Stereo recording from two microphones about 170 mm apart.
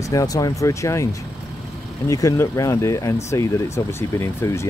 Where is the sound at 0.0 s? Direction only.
20° left (ahead or behind).